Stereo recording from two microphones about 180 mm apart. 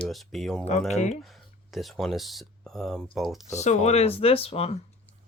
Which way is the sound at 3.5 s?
40° left (ahead or behind).